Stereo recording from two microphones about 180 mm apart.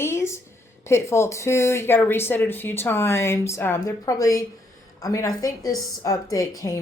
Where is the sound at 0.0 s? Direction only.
15° left (ahead or behind).